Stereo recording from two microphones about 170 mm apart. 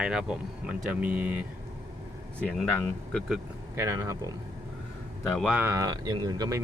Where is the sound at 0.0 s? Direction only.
5° right (ahead or behind).